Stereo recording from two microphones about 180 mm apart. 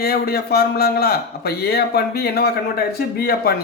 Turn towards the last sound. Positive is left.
turn(degrees=60)  # may be behind; listen again after turning